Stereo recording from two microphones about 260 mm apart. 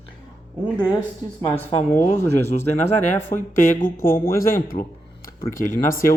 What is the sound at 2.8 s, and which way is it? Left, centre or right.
Speech, left.